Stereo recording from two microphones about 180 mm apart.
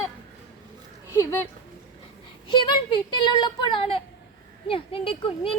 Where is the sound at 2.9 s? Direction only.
25° left (ahead or behind).